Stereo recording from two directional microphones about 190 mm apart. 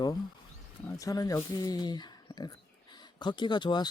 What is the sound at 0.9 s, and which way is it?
Speech, 15° left (ahead or behind).